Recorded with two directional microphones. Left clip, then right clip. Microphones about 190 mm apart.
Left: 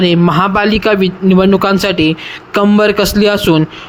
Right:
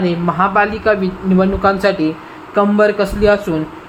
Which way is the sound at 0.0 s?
40° left (ahead or behind).